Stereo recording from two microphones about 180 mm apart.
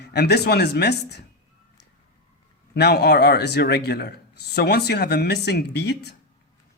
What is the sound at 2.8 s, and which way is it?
Speech, 65° left (ahead or behind).